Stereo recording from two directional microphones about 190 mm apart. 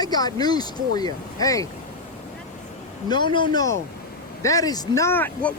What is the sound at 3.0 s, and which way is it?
Speech, 25° left (ahead or behind).